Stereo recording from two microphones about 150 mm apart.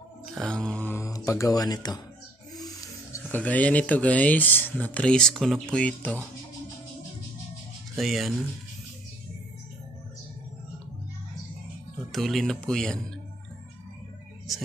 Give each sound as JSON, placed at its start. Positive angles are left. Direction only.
{"t": 0.3, "sound": "mantra", "side_deg": 0}
{"t": 2.5, "sound": "snoring", "side_deg": 25}
{"t": 3.3, "sound": "speech", "side_deg": 10}
{"t": 8.0, "sound": "speech", "side_deg": 0}
{"t": 12.1, "sound": "speech", "side_deg": 0}